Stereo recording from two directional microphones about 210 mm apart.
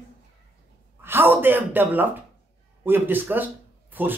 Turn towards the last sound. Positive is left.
turn(degrees=-10)  # may be behind; listen again after turning